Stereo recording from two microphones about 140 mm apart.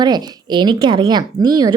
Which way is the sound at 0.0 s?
30° right (ahead or behind).